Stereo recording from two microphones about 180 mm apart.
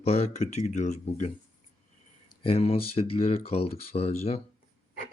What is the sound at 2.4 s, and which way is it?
Speech, 30° left (ahead or behind).